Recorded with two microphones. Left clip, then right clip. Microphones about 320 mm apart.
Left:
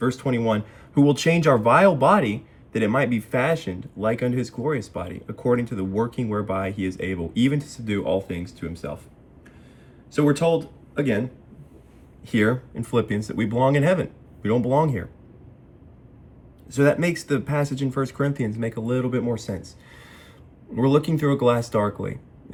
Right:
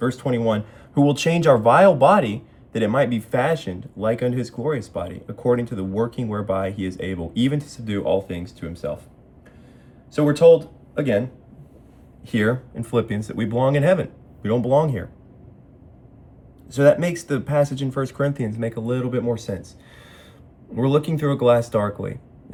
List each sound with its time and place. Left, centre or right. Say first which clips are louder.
0.0 s speech: right 2 dB; centre
12.2 s speech: even; centre
16.8 s speech: right 4 dB; centre
20.7 s speech: even; centre